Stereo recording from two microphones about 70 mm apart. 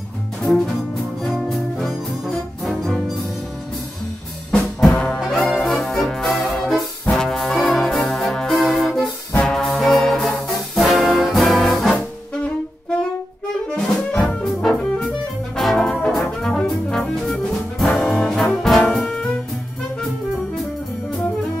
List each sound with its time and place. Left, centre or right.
0.4 s music: centre
4.5 s music: centre
4.9 s brass instrument: centre
5.2 s brass instrument: centre
13.7 s brass instrument: centre
14.4 s music: centre